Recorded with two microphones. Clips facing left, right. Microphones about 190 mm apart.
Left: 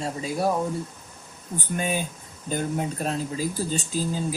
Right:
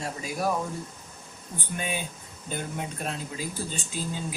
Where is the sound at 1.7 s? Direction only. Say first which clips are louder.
Left 5 dB; 40° left (ahead or behind).